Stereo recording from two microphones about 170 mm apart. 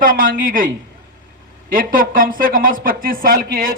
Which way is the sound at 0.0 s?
55° right (ahead or behind).